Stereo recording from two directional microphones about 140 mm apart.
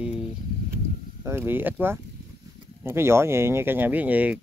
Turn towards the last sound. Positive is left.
turn(degrees=-10)  # may be behind; listen again after turning